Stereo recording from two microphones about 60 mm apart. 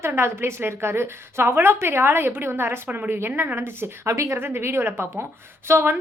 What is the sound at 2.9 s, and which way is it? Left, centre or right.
Speech, right.